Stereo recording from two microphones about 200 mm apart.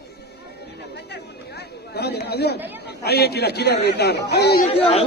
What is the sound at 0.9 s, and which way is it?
Chatter, 60° left (ahead or behind).